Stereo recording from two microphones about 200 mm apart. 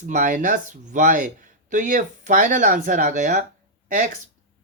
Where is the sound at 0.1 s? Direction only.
40° right (ahead or behind).